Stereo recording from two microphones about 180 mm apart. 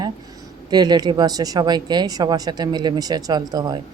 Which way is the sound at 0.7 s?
20° right (ahead or behind).